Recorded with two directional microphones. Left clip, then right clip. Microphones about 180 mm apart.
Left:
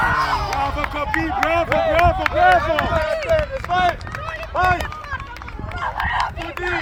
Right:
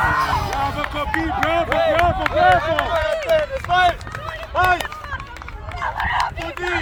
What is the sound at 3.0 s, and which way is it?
Run, 40° left (ahead or behind).